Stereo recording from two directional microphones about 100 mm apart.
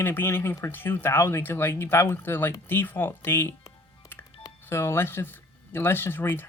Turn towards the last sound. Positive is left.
turn(degrees=25)  # may be behind; listen again after turning